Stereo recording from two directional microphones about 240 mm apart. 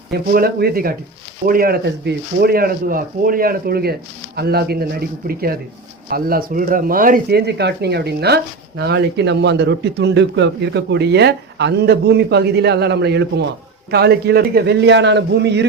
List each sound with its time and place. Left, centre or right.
0.1 s speech: right